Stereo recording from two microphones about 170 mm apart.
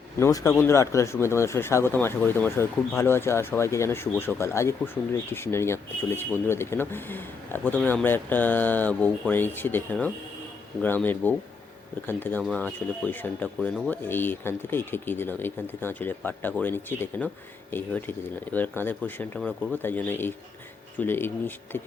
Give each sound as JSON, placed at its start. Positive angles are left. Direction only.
{"t": 0.2, "sound": "speech", "side_deg": 20}